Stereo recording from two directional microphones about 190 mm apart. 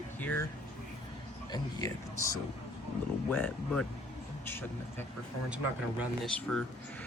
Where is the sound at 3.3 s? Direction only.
10° left (ahead or behind).